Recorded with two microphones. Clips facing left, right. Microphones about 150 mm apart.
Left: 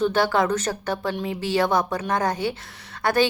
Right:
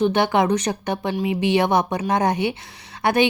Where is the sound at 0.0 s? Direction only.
20° right (ahead or behind).